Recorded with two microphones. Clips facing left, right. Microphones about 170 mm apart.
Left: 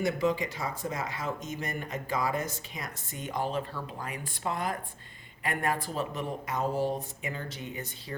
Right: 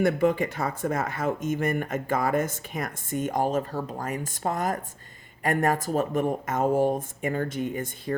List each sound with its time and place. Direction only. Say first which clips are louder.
0.0 s speech: right 6 dB; 55° right (ahead or behind)